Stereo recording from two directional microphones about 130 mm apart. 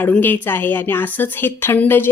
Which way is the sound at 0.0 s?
15° left (ahead or behind).